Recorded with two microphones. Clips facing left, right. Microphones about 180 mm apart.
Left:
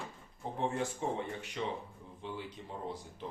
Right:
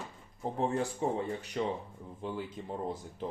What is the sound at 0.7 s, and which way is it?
Speech, 35° right (ahead or behind).